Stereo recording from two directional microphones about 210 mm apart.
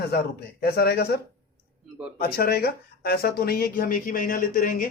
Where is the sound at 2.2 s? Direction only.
45° left (ahead or behind).